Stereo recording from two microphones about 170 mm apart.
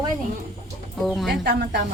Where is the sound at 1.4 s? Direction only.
65° right (ahead or behind).